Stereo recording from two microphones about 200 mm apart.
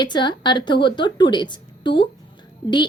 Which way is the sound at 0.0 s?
20° left (ahead or behind).